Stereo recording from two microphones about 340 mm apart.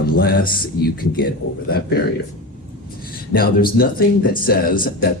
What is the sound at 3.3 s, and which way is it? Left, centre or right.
Speech, left.